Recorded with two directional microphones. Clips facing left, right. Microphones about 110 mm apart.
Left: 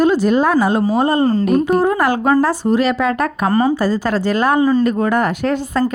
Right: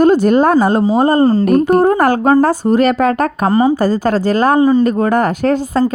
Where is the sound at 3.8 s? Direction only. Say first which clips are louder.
Right 3 dB; 45° right (ahead or behind).